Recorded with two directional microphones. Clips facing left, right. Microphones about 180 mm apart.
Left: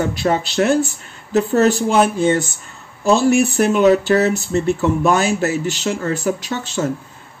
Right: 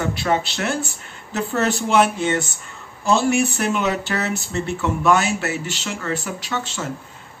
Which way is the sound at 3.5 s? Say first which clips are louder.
Left 9 dB; 40° left (ahead or behind).